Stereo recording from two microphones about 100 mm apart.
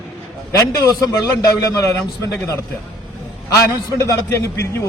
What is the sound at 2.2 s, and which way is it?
Speech, 30° left (ahead or behind).